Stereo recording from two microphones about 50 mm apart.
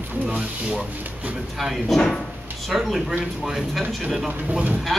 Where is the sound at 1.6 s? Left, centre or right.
Centre.